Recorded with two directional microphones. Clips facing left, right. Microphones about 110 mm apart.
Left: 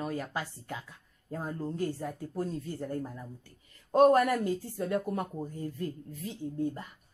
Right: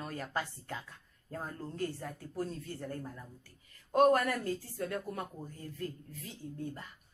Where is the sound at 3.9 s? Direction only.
30° left (ahead or behind).